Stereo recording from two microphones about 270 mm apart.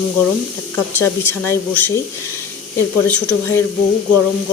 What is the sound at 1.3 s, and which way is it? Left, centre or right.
Speech, centre.